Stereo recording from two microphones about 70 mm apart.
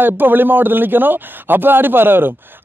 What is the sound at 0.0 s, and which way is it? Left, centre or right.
Speech, right.